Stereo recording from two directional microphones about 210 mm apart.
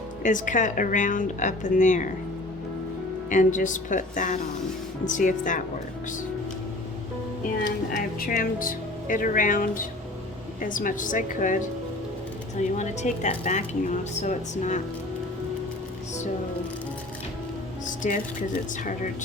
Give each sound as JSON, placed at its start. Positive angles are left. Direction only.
{"t": 0.2, "sound": "a woman's voice", "side_deg": 35}
{"t": 3.2, "sound": "a woman's voice", "side_deg": 35}
{"t": 7.9, "sound": "a woman's voice", "side_deg": 40}
{"t": 12.7, "sound": "a woman's voice", "side_deg": 35}
{"t": 17.8, "sound": "music", "side_deg": 35}